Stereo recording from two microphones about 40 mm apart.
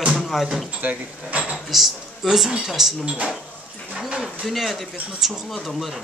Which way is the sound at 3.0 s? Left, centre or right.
Right.